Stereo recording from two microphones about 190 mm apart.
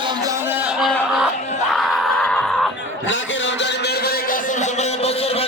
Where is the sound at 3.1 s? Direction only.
70° left (ahead or behind); by 4.3 s 55° left (ahead or behind).